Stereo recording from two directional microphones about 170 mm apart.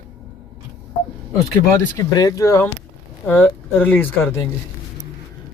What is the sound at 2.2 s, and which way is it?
Speech, 20° left (ahead or behind).